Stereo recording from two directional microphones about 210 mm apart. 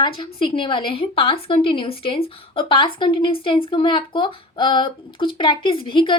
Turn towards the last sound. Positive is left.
turn(degrees=25)  # may be behind; listen again after turning